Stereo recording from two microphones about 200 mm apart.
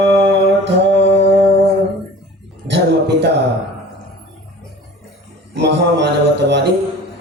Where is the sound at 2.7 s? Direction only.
60° right (ahead or behind).